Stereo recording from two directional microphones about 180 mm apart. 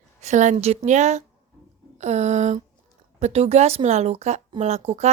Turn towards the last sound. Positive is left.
turn(degrees=-35)  # may be behind; listen again after turning